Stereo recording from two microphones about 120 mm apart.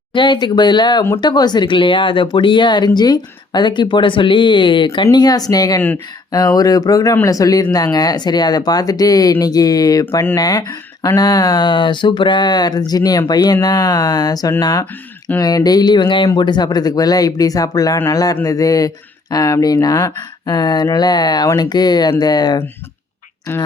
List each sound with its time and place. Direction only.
0.1 s speech: 40° left (ahead or behind)
23.5 s speech: 20° left (ahead or behind)